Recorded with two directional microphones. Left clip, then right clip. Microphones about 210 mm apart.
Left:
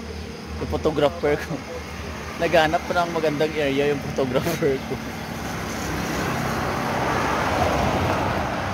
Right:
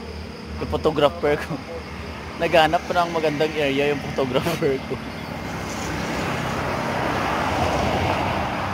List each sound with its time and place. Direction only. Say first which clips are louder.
0.8 s speech: right 2 dB; 5° right (ahead or behind)
2.4 s speech: right 2 dB; 5° right (ahead or behind)
7.0 s vehicle: left 1 dB; 55° left (ahead or behind); by 8.5 s 30° left (ahead or behind)